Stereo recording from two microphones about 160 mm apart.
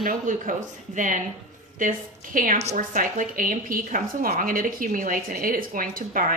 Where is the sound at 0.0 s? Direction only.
55° right (ahead or behind).